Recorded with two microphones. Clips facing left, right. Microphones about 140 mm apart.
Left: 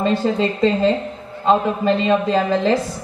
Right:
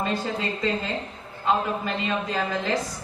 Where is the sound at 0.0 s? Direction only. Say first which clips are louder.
Left 9 dB; 25° left (ahead or behind).